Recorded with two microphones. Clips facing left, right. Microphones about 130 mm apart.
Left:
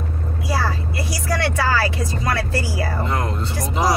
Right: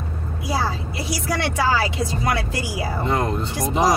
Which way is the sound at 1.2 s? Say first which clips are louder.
Left 1 dB; 15° right (ahead or behind).